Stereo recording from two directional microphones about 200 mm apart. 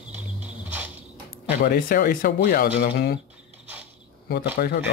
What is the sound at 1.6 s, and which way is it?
Speech, 45° left (ahead or behind).